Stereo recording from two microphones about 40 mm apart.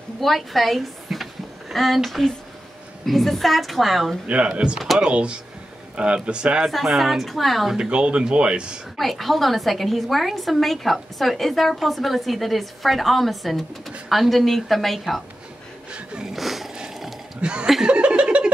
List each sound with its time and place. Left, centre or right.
0.2 s a woman's voice: centre
4.3 s speech: right
4.7 s a woman's voice: centre
5.0 s speech: right
6.7 s a woman's voice: centre
7.7 s speech: right
8.9 s a woman's voice: centre
16.3 s a sound: centre
17.4 s speech: right
17.8 s chuckle: right